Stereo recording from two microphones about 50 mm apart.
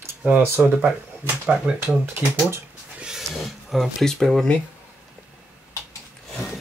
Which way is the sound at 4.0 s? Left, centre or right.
Centre.